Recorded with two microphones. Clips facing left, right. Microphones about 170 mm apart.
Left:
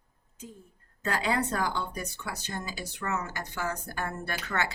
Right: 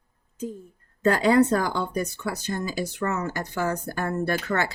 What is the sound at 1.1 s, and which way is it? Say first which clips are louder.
A woman's voice: right 10 dB; 45° right (ahead or behind).